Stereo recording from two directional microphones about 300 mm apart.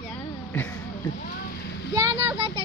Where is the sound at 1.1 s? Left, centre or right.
Left.